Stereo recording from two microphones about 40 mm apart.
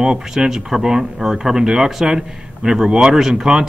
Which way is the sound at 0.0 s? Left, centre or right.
Centre.